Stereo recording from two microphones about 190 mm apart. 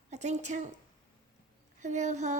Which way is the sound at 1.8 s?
40° right (ahead or behind).